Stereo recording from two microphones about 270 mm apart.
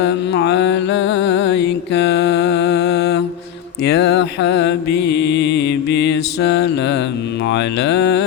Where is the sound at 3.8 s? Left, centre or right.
Left.